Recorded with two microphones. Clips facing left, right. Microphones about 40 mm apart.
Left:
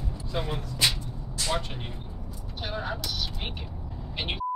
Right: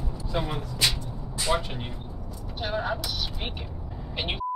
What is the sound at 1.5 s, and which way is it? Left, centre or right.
Speech, centre.